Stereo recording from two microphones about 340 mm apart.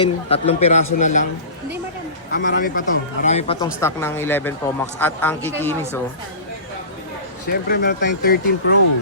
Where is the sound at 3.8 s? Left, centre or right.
Centre.